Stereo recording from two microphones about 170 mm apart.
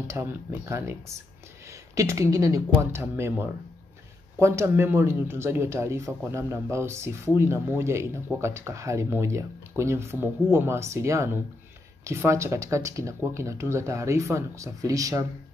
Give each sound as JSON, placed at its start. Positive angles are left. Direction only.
{"t": 0.0, "sound": "speech", "side_deg": -15}